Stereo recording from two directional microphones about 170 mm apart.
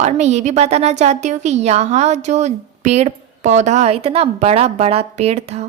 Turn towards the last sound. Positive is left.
turn(degrees=-40)  # may be behind; listen again after turning